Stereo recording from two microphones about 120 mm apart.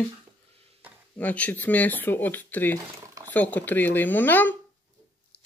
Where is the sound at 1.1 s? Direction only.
10° left (ahead or behind).